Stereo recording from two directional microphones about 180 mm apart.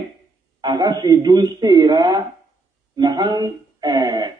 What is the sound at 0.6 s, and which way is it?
Speech, 25° right (ahead or behind).